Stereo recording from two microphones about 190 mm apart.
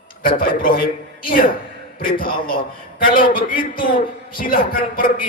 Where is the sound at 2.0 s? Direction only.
50° left (ahead or behind).